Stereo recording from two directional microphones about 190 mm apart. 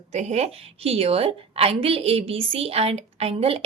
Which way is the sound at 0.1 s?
35° right (ahead or behind).